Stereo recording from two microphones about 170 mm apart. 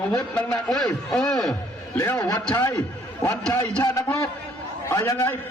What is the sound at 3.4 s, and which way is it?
A man's voice, 10° left (ahead or behind).